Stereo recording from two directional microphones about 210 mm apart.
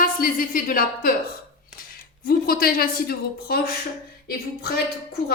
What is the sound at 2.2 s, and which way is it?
A woman's voice, 45° left (ahead or behind).